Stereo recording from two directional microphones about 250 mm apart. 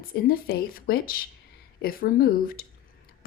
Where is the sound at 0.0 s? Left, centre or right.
Left.